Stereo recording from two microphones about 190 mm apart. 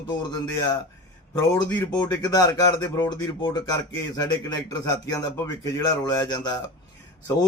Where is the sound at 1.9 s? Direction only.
20° left (ahead or behind).